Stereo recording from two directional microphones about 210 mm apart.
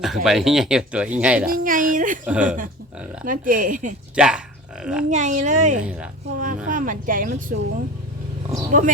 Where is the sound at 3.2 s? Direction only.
40° right (ahead or behind).